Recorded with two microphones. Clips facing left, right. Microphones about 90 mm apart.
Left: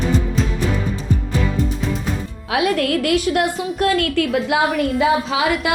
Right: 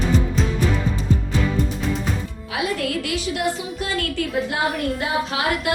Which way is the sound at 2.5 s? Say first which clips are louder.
Left 6 dB; 65° left (ahead or behind).